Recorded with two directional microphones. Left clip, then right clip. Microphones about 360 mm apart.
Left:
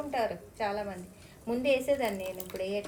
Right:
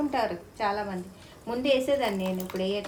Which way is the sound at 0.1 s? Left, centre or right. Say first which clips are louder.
Right 3 dB; right.